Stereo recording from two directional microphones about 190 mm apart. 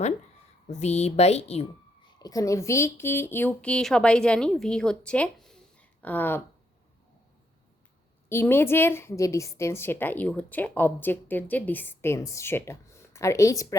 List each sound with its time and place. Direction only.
0.7 s speech: 35° left (ahead or behind)
2.1 s a woman's voice: 20° left (ahead or behind)
8.3 s a woman's voice: 10° left (ahead or behind)